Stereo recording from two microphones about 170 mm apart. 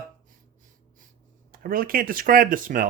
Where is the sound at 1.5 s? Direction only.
55° right (ahead or behind).